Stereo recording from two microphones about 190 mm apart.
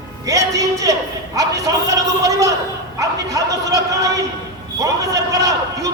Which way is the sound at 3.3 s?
20° right (ahead or behind).